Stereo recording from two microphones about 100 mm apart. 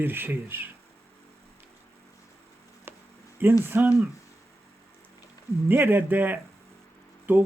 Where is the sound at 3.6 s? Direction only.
20° right (ahead or behind).